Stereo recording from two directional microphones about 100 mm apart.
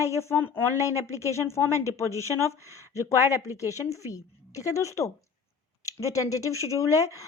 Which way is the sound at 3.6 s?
35° left (ahead or behind).